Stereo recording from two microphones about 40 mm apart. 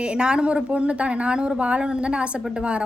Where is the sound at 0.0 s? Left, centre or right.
Right.